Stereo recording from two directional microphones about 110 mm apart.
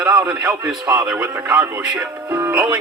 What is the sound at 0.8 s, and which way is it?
Speech, 35° right (ahead or behind).